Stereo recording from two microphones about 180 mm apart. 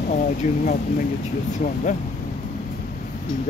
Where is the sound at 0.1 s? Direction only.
45° left (ahead or behind).